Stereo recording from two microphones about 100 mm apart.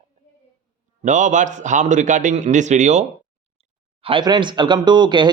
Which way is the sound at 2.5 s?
90° right.